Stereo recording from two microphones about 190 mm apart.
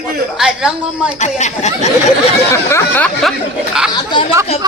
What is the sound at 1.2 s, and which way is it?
Speech, 35° left (ahead or behind).